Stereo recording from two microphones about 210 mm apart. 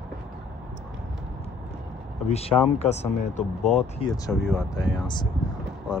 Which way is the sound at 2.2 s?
30° left (ahead or behind).